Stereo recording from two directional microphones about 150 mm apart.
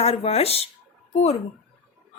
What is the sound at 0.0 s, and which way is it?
Speech, 40° left (ahead or behind).